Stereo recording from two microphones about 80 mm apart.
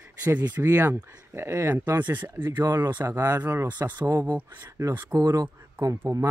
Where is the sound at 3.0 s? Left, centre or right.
Right.